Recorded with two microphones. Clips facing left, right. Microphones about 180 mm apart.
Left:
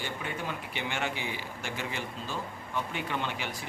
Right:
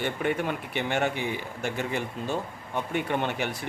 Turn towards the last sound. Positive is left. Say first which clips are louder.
# right 6 dB
turn(degrees=-55)  # may be behind; listen again after turning